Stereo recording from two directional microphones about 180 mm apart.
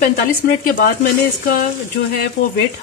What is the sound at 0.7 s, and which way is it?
Speech, 50° left (ahead or behind).